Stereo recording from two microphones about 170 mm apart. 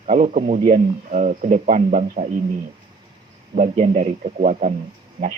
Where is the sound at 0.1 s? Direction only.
55° right (ahead or behind).